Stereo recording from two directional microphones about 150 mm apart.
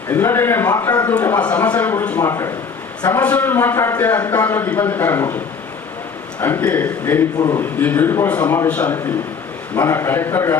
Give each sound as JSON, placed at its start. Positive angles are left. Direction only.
{"t": 0.1, "sound": "a man's voice", "side_deg": 15}
{"t": 3.2, "sound": "a man's voice", "side_deg": 10}
{"t": 6.4, "sound": "a man's voice", "side_deg": 15}
{"t": 7.3, "sound": "a man's voice", "side_deg": 25}
{"t": 7.6, "sound": "a man's voice", "side_deg": 10}